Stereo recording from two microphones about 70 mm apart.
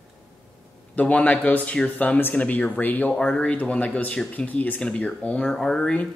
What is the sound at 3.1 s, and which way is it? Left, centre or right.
Speech, centre.